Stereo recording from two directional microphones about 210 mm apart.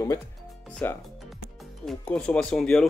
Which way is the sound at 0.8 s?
10° left (ahead or behind).